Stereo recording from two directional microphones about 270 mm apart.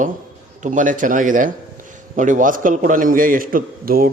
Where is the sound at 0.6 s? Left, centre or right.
Right.